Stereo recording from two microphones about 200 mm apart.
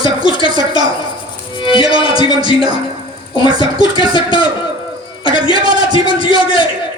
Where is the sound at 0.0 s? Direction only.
25° left (ahead or behind).